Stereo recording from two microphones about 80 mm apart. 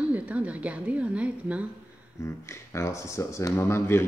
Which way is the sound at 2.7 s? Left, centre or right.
Left.